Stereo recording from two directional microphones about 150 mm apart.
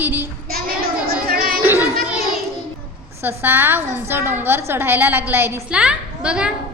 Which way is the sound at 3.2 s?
15° right (ahead or behind).